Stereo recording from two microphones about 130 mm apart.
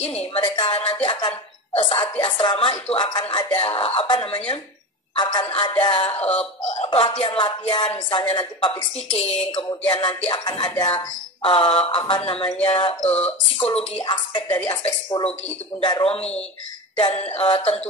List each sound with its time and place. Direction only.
0.3 s speech: 40° left (ahead or behind)
9.2 s speech: 50° left (ahead or behind)
9.7 s speech: 35° left (ahead or behind)
13.5 s speech: 45° left (ahead or behind)
14.0 s speech: 35° left (ahead or behind)
14.5 s speech: 15° left (ahead or behind)
14.8 s speech: 40° left (ahead or behind)